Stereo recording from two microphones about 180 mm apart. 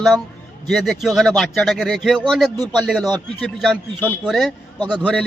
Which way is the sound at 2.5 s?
20° right (ahead or behind).